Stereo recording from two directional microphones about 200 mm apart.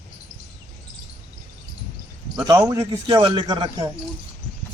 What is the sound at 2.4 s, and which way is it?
A man's voice, 15° right (ahead or behind).